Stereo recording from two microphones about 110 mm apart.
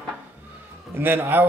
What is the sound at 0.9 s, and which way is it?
Speech, 20° right (ahead or behind).